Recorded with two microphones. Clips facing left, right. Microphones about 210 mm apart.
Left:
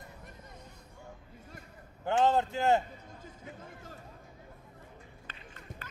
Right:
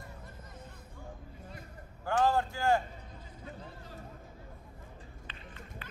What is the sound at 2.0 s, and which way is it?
Speech, 20° left (ahead or behind).